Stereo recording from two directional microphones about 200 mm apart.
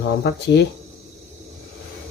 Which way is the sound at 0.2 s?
55° left (ahead or behind).